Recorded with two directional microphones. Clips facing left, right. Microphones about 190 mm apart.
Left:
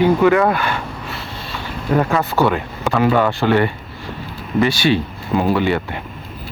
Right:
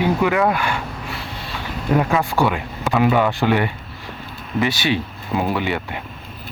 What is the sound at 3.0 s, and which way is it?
Speech, 15° right (ahead or behind).